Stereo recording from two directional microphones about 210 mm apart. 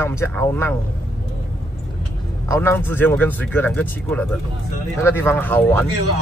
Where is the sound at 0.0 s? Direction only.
10° left (ahead or behind).